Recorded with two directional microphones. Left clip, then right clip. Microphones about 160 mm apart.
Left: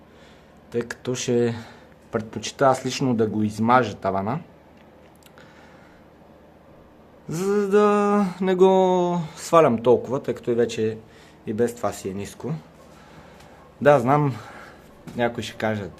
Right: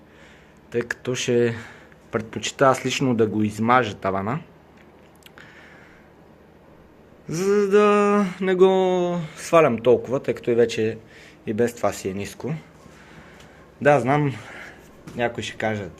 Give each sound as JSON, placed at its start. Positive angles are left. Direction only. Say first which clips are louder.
{"t": 0.7, "sound": "speech", "louder": "right 2 dB", "side_deg": 15}
{"t": 7.3, "sound": "speech", "louder": "right 3 dB", "side_deg": 15}
{"t": 13.8, "sound": "speech", "louder": "left 1 dB", "side_deg": 25}